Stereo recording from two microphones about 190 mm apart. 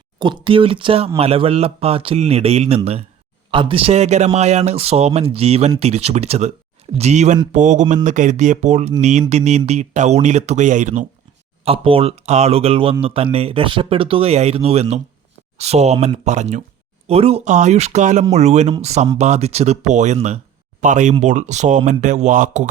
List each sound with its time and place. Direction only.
0.2 s speech: 25° right (ahead or behind); by 22.7 s 45° right (ahead or behind)